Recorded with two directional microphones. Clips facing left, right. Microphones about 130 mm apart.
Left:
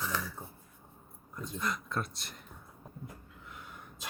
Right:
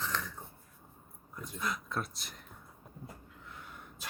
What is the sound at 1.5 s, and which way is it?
Speech, centre (ahead or behind).